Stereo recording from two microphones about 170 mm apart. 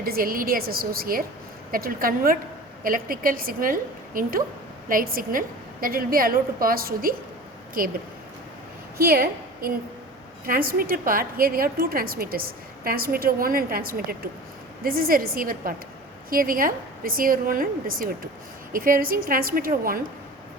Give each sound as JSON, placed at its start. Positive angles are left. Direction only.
{"t": 0.0, "sound": "a woman's voice", "side_deg": -60}
{"t": 9.0, "sound": "a woman's voice", "side_deg": -65}